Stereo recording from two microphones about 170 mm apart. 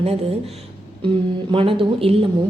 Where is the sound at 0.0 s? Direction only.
35° right (ahead or behind).